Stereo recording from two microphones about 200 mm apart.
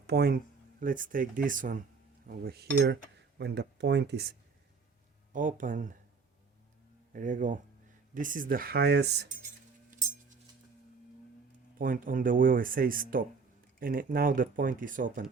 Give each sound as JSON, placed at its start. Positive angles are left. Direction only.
{"t": 0.1, "sound": "speech", "side_deg": -50}
{"t": 5.3, "sound": "speech", "side_deg": -40}
{"t": 7.1, "sound": "speech", "side_deg": -40}
{"t": 11.8, "sound": "speech", "side_deg": -45}